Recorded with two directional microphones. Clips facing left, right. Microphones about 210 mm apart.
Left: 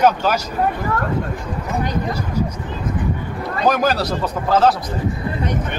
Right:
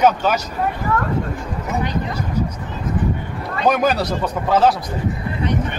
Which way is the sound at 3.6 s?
Centre (ahead or behind).